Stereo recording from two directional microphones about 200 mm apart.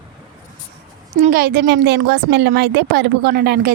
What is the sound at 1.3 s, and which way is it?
A woman's voice, 50° right (ahead or behind).